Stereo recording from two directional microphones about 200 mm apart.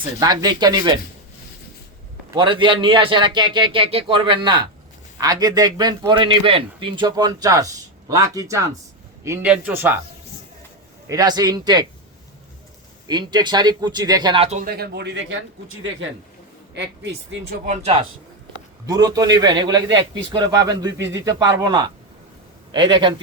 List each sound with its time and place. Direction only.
0.0 s a man's voice: 20° right (ahead or behind)
2.3 s a man's voice: 25° right (ahead or behind); by 10.0 s 10° right (ahead or behind)
11.1 s a man's voice: 20° right (ahead or behind)
13.1 s a man's voice: 20° right (ahead or behind)
14.6 s speech: 50° right (ahead or behind); by 15.4 s 65° right (ahead or behind)
16.7 s speech: 60° right (ahead or behind)
17.3 s speech: 70° right (ahead or behind)
18.9 s a man's voice: 15° right (ahead or behind)